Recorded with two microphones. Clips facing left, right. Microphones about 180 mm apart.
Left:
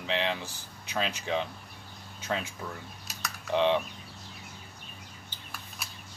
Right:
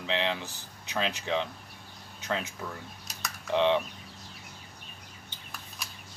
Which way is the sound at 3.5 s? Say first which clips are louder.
Even; 20° right (ahead or behind).